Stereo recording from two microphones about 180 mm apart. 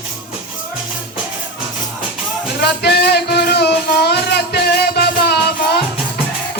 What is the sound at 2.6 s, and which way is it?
Music, 65° left (ahead or behind).